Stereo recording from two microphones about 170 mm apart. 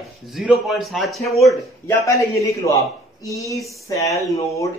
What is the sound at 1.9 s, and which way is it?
Speech, 20° left (ahead or behind).